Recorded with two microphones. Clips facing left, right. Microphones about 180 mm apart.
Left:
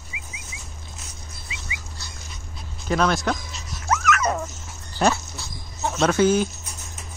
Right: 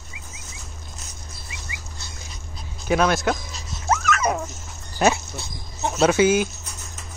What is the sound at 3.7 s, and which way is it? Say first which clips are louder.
Dog: even; 25° right (ahead or behind).